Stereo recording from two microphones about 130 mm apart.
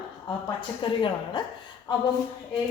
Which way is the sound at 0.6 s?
35° left (ahead or behind).